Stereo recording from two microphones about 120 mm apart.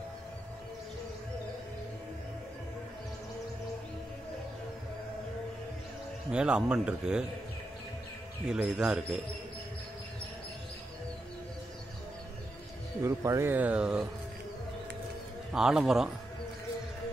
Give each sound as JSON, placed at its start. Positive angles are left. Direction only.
{"t": 6.3, "sound": "speech", "side_deg": -10}
{"t": 8.5, "sound": "speech", "side_deg": -5}
{"t": 13.0, "sound": "speech", "side_deg": -25}
{"t": 15.5, "sound": "a man's voice", "side_deg": -5}